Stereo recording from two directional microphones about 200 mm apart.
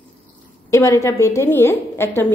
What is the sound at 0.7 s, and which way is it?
Speech, 15° left (ahead or behind).